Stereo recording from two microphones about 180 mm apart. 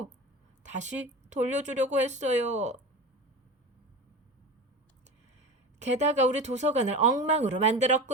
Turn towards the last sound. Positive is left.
turn(degrees=-40)  # may be behind; listen again after turning